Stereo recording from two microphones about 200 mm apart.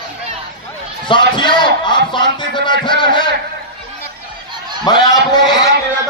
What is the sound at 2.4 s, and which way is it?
Music, 25° left (ahead or behind).